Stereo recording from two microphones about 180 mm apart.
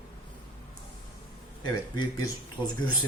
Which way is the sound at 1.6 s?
25° left (ahead or behind).